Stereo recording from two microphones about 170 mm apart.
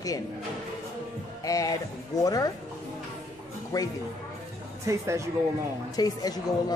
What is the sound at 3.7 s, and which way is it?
Speech, 20° left (ahead or behind).